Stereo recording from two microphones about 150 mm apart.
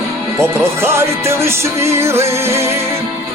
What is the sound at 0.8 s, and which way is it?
Music, 15° right (ahead or behind).